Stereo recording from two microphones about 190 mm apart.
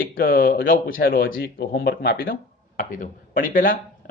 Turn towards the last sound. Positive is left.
turn(degrees=50)  # may be behind; listen again after turning